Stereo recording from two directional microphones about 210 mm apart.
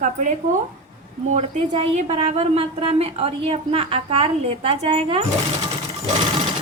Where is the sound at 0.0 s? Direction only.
35° right (ahead or behind).